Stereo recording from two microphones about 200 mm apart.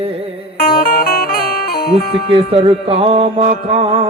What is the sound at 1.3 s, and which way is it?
Music, 50° left (ahead or behind).